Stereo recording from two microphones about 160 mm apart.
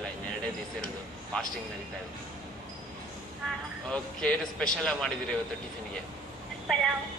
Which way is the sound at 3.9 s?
10° left (ahead or behind).